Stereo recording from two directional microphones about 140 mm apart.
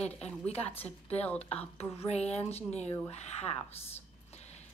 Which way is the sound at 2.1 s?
50° left (ahead or behind).